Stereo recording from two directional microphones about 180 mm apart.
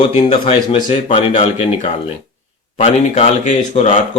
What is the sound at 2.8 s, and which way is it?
Speech, 40° left (ahead or behind).